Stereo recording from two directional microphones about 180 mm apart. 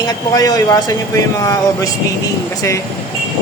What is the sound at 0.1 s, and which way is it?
Speech, 20° left (ahead or behind).